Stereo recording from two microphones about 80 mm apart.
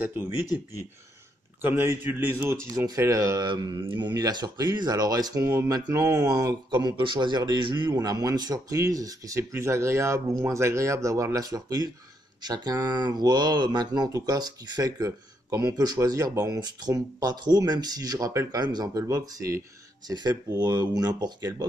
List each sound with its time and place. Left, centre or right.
0.0 s a man's voice: right
1.6 s a man's voice: right
3.0 s speech: right
3.4 s mantra: right
4.1 s speech: right
5.9 s speech: right
6.2 s speech: right
9.4 s speech: right
19.0 s speech: right
20.1 s speech: right